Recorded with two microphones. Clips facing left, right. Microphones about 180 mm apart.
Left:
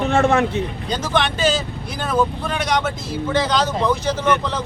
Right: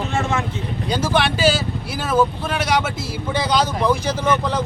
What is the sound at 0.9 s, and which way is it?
Speech, 10° right (ahead or behind).